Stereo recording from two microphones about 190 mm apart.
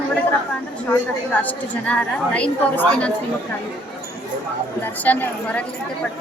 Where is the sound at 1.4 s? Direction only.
5° left (ahead or behind).